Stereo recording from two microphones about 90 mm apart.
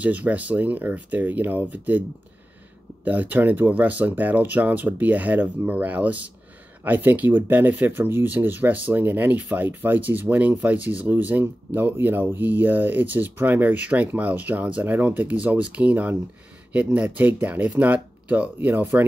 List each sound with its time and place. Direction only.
0.0 s speech: 15° right (ahead or behind)